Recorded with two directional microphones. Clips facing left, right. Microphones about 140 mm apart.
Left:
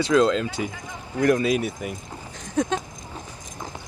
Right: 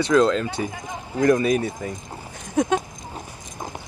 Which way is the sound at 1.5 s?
15° left (ahead or behind).